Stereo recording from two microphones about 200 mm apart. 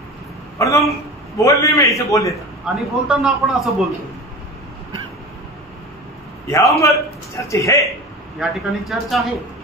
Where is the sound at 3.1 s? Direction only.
5° right (ahead or behind).